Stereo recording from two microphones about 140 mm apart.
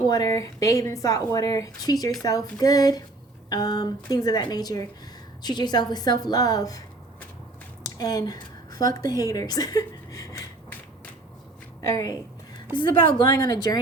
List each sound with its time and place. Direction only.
0.1 s a woman's voice: 25° left (ahead or behind)
7.9 s a woman's voice: 25° left (ahead or behind)
11.8 s a woman's voice: 25° left (ahead or behind)